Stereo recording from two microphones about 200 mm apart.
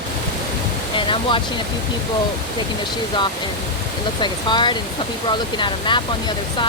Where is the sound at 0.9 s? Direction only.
25° left (ahead or behind).